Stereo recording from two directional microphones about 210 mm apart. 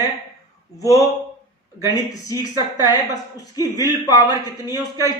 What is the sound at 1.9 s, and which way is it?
Speech, 15° left (ahead or behind).